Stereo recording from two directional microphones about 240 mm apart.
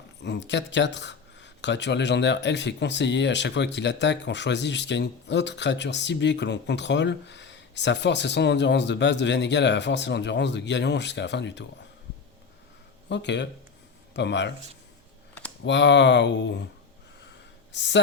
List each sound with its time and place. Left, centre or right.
0.2 s speech: left
13.1 s a man's voice: left
15.6 s speech: left
17.2 s a sound: left